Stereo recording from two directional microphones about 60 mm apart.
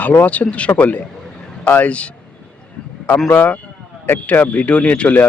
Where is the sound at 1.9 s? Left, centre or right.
Centre.